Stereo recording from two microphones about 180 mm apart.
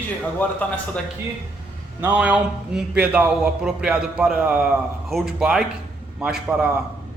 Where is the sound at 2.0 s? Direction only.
5° right (ahead or behind).